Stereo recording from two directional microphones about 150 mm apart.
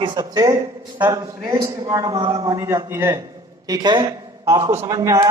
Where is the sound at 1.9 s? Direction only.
25° right (ahead or behind).